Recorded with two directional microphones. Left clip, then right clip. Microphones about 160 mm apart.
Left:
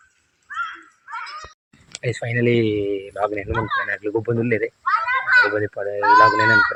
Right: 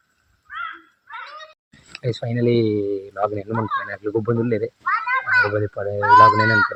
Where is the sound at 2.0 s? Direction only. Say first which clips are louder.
Left 1 dB; 5° right (ahead or behind).